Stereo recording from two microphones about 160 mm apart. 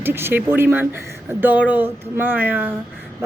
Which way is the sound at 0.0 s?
15° right (ahead or behind).